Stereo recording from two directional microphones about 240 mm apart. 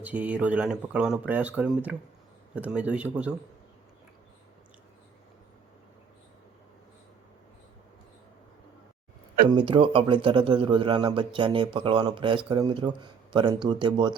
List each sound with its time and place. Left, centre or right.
0.0 s speech: centre
9.5 s speech: centre